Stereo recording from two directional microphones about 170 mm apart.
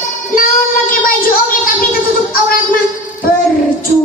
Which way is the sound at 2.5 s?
55° left (ahead or behind).